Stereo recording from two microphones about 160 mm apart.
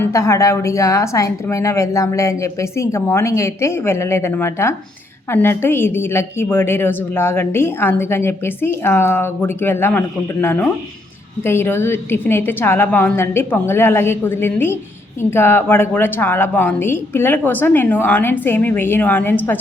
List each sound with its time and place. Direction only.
0.0 s a woman's voice: 20° left (ahead or behind)